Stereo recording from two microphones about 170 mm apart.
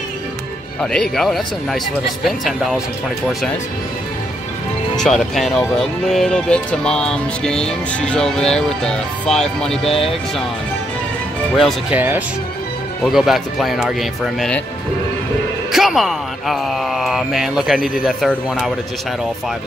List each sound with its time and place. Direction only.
0.9 s speech: 5° left (ahead or behind)
4.9 s speech: centre (ahead or behind)
9.8 s speech: 35° left (ahead or behind)
11.5 s speech: 5° right (ahead or behind)
15.7 s speech: centre (ahead or behind)